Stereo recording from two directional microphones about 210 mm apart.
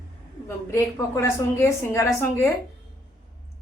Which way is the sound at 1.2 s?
10° left (ahead or behind).